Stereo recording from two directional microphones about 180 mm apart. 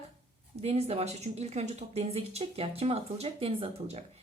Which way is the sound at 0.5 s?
35° right (ahead or behind).